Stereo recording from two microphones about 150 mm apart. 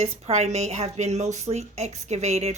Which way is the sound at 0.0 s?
45° right (ahead or behind).